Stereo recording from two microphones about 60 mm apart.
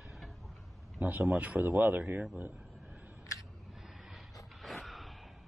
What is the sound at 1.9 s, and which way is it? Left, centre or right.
Speech, right.